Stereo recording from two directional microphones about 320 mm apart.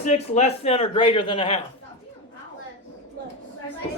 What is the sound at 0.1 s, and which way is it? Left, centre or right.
A man's voice, centre.